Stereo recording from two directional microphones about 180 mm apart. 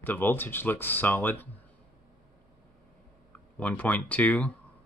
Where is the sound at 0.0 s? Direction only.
10° left (ahead or behind).